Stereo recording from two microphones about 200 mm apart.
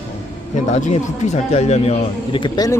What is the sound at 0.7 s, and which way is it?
Speech, 35° left (ahead or behind).